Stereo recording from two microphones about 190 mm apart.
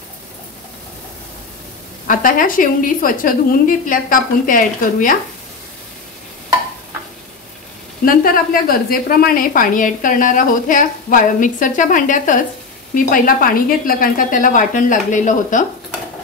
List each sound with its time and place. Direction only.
2.0 s a woman's voice: 45° left (ahead or behind)
8.0 s a woman's voice: 50° left (ahead or behind)